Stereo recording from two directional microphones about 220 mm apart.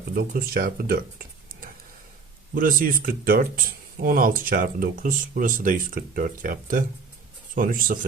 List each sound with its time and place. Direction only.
0.2 s speech: 40° right (ahead or behind)
2.6 s speech: 40° right (ahead or behind)